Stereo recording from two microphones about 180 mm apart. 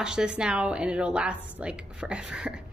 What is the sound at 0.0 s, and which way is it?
A woman's voice, 5° right (ahead or behind).